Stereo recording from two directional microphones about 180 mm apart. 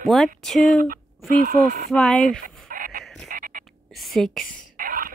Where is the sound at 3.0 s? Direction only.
Centre (ahead or behind).